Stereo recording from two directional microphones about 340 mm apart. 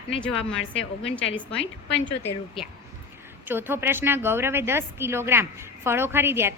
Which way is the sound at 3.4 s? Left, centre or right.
Centre.